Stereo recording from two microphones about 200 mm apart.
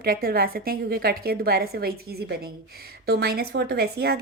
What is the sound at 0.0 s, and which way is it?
A woman's voice, 50° right (ahead or behind).